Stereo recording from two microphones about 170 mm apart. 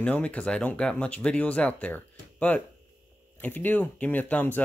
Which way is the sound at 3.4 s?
10° left (ahead or behind).